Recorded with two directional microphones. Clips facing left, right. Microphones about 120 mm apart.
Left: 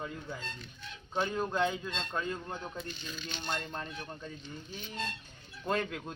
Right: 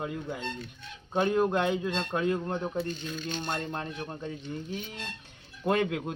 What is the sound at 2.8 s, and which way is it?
Speech, 55° right (ahead or behind).